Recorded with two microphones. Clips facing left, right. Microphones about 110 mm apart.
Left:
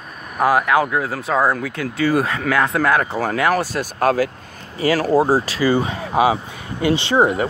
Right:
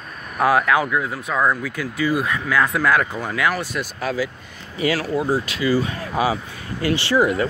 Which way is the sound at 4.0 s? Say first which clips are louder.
Left 8 dB; 50° left (ahead or behind).